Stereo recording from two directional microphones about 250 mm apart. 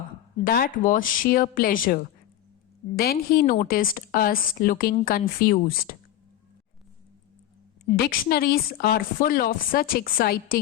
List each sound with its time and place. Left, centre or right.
0.4 s a woman's voice: left
7.9 s a woman's voice: left